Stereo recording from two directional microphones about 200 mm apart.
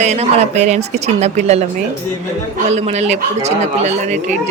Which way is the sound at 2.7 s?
35° right (ahead or behind).